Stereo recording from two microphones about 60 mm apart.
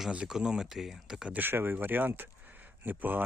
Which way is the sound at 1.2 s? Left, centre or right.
Right.